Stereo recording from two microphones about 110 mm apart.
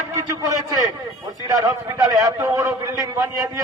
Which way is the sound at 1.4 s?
30° right (ahead or behind).